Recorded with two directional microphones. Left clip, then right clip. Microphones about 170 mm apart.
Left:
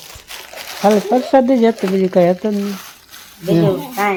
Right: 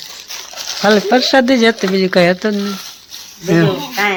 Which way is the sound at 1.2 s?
10° left (ahead or behind).